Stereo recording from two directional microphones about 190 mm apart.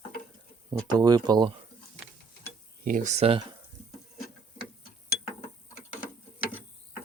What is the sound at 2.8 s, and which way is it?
Speech, 45° right (ahead or behind).